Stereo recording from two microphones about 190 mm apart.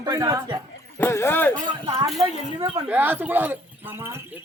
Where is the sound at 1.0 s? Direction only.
15° left (ahead or behind).